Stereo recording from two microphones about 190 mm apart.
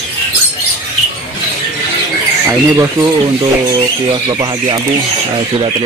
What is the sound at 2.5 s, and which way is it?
Speech, 15° right (ahead or behind).